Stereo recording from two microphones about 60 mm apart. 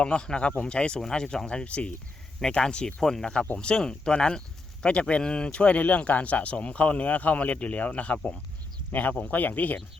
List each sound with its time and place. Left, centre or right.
0.0 s speech: centre